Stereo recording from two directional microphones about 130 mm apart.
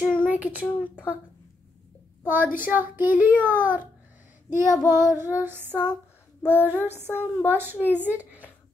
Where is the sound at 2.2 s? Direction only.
15° right (ahead or behind).